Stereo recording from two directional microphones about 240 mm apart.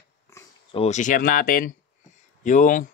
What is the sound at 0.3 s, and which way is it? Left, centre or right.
Speech, left.